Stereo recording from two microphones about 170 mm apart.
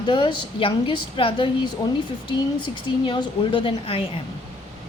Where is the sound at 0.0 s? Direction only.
25° left (ahead or behind).